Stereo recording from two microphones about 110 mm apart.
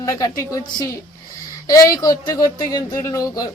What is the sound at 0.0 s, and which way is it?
A child's voice, 30° left (ahead or behind).